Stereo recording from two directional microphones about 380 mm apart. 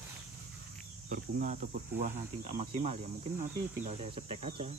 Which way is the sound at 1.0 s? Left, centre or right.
Right.